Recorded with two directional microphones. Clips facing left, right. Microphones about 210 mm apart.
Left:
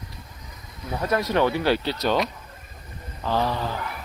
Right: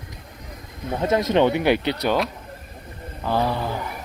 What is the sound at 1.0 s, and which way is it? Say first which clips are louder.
Speech: right 4 dB; 25° right (ahead or behind).